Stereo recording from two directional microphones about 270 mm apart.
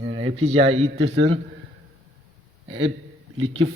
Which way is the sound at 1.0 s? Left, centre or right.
Right.